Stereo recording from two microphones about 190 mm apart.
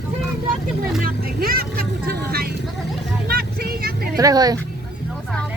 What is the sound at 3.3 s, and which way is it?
Vehicle, 55° right (ahead or behind).